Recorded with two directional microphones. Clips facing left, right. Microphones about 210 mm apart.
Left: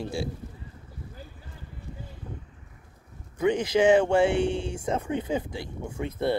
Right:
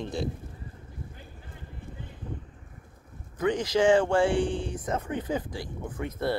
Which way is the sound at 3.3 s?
20° left (ahead or behind).